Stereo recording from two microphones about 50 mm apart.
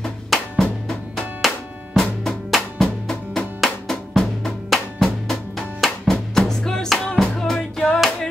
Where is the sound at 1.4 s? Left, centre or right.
Centre.